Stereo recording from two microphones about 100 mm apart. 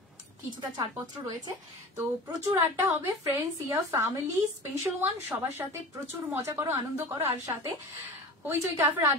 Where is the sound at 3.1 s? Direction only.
35° right (ahead or behind).